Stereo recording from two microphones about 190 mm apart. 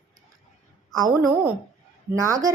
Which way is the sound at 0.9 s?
20° right (ahead or behind).